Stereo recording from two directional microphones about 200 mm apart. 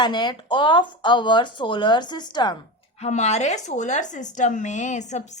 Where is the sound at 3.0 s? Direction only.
35° left (ahead or behind).